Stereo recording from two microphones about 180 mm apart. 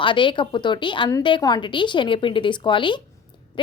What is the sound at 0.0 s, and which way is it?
A woman's voice, 25° left (ahead or behind).